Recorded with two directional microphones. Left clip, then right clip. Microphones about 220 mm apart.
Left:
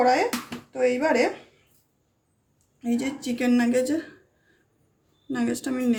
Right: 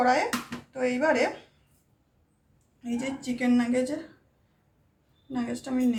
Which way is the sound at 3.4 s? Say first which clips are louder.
Left 3 dB; 50° left (ahead or behind).